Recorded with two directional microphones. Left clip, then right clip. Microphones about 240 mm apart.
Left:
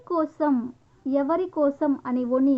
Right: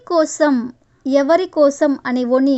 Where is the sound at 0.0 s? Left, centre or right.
Right.